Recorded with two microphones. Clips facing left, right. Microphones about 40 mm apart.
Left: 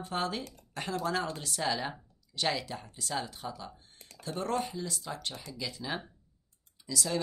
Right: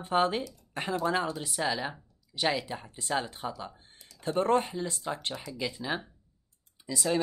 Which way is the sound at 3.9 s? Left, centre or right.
Left.